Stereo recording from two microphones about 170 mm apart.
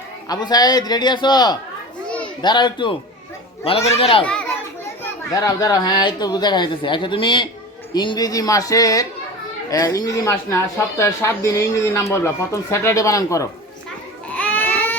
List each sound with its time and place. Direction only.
0.3 s speech: 25° left (ahead or behind)
4.2 s speech: 5° left (ahead or behind)
5.3 s speech: 20° left (ahead or behind)
14.3 s baby cry: 10° left (ahead or behind)